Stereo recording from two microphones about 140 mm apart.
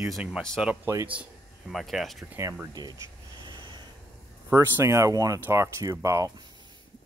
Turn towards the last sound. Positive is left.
turn(degrees=-20)  # may be behind; listen again after turning